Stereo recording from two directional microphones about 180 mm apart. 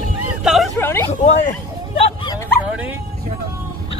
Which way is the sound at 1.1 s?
40° left (ahead or behind).